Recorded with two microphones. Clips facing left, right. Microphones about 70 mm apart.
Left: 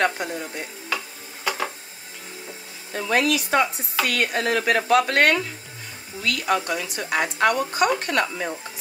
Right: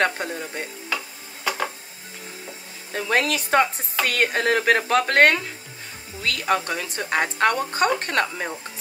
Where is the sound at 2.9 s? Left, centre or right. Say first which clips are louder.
Left 1 dB; right.